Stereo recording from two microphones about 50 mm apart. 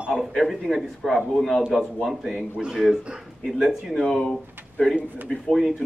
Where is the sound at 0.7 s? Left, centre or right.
Centre.